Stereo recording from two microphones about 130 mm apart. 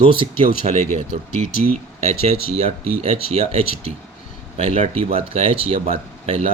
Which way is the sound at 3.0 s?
50° right (ahead or behind).